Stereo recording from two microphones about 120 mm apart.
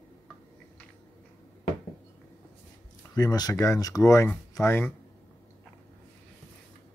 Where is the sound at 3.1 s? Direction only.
35° left (ahead or behind).